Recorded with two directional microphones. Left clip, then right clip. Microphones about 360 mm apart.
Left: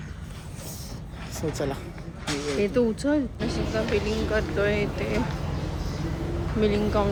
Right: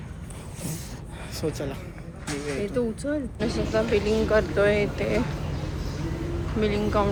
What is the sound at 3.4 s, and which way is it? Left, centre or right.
Speech, centre.